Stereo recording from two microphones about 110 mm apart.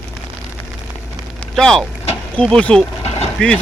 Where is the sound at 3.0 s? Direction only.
70° left (ahead or behind).